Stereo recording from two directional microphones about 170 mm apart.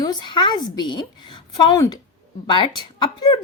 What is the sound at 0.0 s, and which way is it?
Speech, 25° left (ahead or behind).